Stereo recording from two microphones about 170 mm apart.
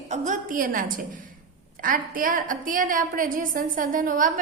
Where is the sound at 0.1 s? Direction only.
50° right (ahead or behind).